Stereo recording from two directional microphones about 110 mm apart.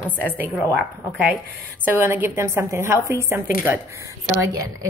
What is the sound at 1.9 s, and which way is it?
A woman's voice, 20° right (ahead or behind).